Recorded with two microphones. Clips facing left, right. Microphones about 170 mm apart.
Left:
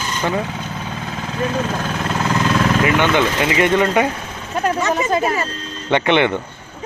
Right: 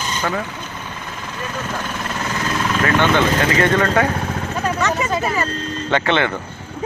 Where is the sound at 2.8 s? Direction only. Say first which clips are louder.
Right 3 dB; 15° left (ahead or behind).